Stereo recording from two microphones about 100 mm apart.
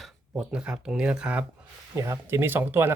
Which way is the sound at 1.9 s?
30° right (ahead or behind).